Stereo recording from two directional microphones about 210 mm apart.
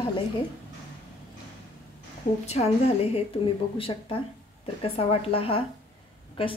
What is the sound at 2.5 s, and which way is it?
A woman's voice, 30° left (ahead or behind).